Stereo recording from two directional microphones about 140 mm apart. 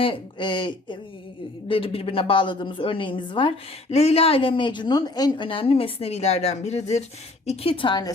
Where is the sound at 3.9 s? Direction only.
50° left (ahead or behind).